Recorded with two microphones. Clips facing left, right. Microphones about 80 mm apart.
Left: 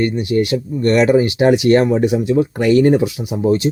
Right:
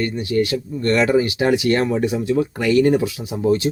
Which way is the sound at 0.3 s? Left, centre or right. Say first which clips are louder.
Left 3 dB; left.